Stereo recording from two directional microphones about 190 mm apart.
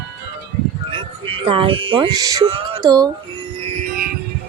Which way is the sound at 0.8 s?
30° right (ahead or behind).